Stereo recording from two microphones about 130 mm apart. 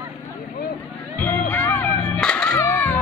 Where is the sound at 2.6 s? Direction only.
15° left (ahead or behind).